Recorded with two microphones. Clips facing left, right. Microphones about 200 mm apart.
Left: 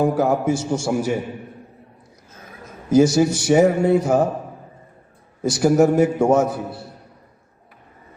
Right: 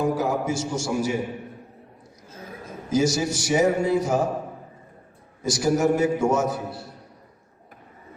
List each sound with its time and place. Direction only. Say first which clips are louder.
0.0 s a man's voice: left 5 dB; 55° left (ahead or behind)
2.9 s a man's voice: left 7 dB; 55° left (ahead or behind)
5.4 s a man's voice: left 6 dB; 60° left (ahead or behind)